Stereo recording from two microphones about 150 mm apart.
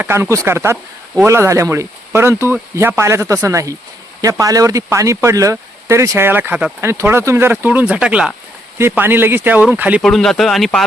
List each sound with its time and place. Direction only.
0.0 s speech: 15° right (ahead or behind)
10.0 s speech: centre (ahead or behind)